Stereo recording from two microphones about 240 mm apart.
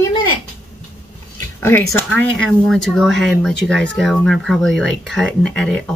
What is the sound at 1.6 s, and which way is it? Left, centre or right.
Speech, centre.